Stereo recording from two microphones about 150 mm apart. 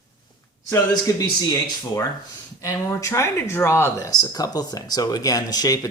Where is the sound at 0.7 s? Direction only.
25° left (ahead or behind).